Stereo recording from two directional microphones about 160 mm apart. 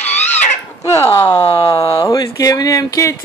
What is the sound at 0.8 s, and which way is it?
Crow, 15° left (ahead or behind).